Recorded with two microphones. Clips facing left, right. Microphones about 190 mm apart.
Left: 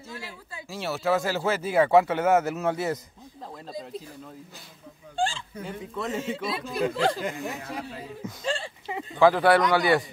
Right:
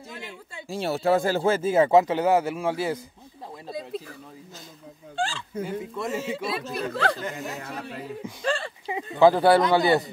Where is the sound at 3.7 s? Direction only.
60° right (ahead or behind).